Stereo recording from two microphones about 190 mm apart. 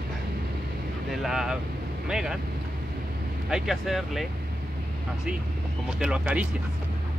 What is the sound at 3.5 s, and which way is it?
Speech, 5° right (ahead or behind).